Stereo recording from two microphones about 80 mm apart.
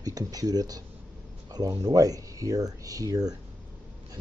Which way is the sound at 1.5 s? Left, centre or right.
Right.